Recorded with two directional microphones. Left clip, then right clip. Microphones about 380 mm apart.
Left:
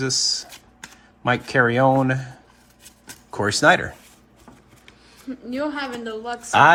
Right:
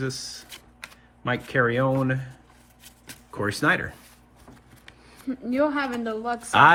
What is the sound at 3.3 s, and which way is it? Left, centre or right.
Speech, centre.